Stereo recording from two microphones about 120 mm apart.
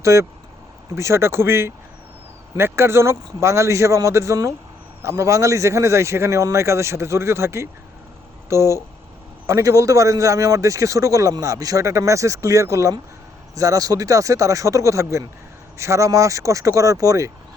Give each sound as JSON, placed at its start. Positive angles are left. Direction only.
{"t": 0.0, "sound": "a man's voice", "side_deg": -25}